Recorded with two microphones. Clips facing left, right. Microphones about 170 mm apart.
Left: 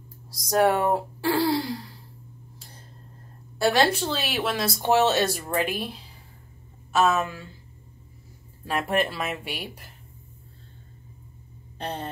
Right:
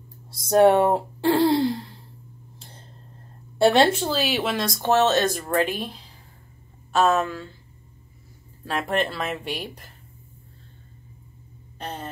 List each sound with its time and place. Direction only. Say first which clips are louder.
0.3 s speech: right 5 dB; 25° right (ahead or behind)
3.5 s speech: right 4 dB; 25° right (ahead or behind)
4.1 s speech: right 3 dB; centre (ahead or behind)
8.6 s speech: even; 10° left (ahead or behind)
11.8 s a sound: left 2 dB; 35° left (ahead or behind)